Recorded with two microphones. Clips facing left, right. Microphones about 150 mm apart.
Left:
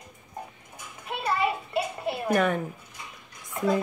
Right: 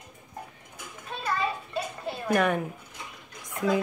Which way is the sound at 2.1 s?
65° left (ahead or behind).